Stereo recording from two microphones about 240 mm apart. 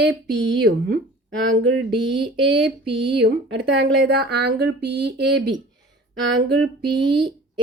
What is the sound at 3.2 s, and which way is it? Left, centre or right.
A woman's voice, right.